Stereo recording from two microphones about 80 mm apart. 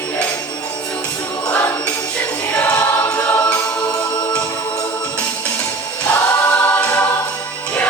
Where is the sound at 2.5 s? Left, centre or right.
Centre.